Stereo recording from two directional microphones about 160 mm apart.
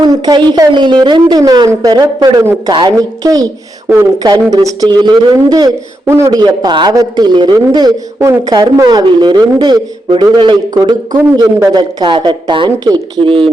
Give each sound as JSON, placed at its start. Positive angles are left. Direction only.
{"t": 0.0, "sound": "speech", "side_deg": -25}